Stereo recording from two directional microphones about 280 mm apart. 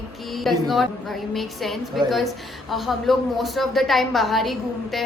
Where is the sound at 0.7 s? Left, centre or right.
Centre.